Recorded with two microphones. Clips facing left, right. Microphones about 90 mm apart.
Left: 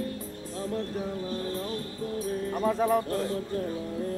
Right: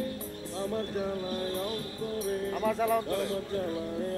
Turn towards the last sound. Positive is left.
turn(degrees=35)  # may be behind; listen again after turning